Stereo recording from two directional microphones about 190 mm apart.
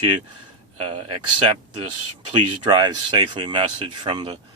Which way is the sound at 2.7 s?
25° right (ahead or behind).